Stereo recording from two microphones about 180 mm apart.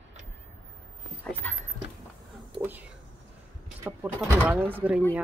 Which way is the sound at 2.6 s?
10° right (ahead or behind).